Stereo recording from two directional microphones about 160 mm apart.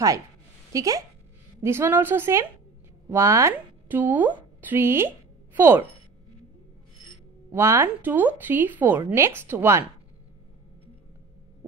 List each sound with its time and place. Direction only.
0.7 s a woman's voice: 20° right (ahead or behind)
7.5 s a woman's voice: 15° right (ahead or behind)